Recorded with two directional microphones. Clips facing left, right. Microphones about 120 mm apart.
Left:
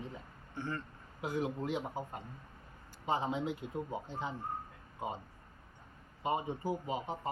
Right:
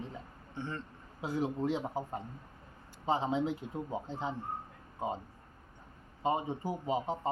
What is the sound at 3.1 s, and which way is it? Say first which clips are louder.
Speech: right 3 dB; 30° right (ahead or behind).